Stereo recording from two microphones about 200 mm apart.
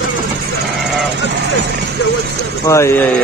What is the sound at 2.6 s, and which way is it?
Speech, 15° left (ahead or behind).